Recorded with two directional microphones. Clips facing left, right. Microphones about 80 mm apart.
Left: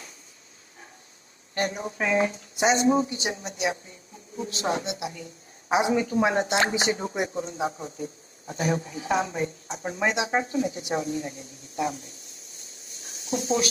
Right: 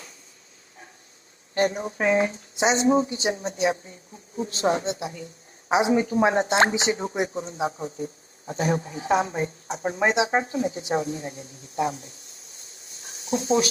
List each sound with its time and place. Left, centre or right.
1.5 s speech: right
2.6 s speech: right
13.0 s a sound: right